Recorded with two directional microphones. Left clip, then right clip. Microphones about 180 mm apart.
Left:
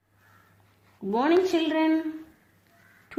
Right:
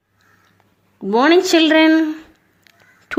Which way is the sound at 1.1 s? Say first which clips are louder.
Right 10 dB; 35° right (ahead or behind).